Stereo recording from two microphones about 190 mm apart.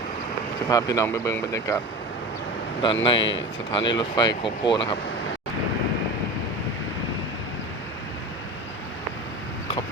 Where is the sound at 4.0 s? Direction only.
25° left (ahead or behind).